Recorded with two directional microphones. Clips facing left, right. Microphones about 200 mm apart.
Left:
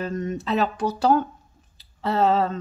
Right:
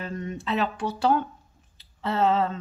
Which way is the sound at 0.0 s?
40° left (ahead or behind).